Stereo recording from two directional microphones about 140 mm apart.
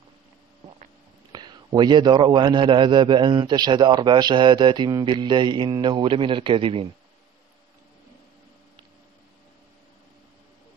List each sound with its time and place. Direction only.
1.3 s a man's voice: 30° right (ahead or behind)